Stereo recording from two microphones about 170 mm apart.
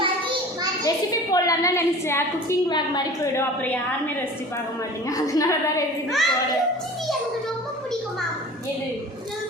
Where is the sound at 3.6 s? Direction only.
10° left (ahead or behind).